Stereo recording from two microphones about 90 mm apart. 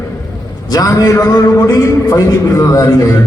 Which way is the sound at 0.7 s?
45° left (ahead or behind).